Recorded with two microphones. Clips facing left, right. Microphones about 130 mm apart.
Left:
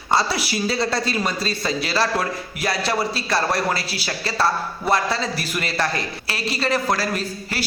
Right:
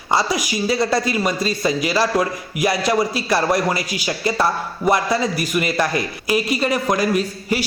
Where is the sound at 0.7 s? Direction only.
15° right (ahead or behind).